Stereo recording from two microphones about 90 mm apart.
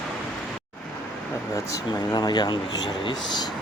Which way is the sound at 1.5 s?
45° left (ahead or behind).